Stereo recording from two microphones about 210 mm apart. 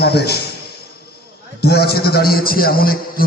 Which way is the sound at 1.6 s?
50° left (ahead or behind).